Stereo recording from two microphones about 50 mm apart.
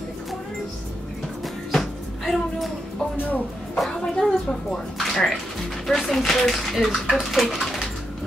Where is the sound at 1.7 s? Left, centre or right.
Centre.